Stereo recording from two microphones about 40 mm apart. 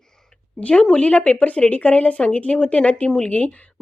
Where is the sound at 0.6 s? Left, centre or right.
Left.